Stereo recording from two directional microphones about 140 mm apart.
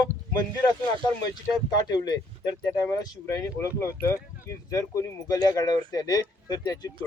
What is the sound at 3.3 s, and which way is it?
Speech, 20° left (ahead or behind).